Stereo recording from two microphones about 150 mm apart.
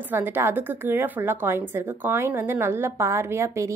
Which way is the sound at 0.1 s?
15° right (ahead or behind).